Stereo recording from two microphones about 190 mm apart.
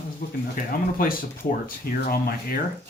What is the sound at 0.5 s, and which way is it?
Speech, 50° left (ahead or behind).